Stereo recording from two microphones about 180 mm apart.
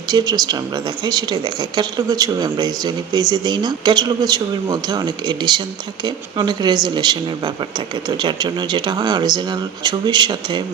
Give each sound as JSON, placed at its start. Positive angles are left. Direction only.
{"t": 0.1, "sound": "a woman's voice", "side_deg": -20}